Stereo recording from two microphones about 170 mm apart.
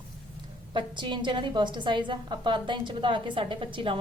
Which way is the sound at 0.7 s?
30° right (ahead or behind).